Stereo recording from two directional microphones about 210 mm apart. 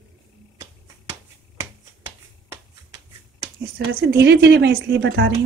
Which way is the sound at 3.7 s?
55° right (ahead or behind).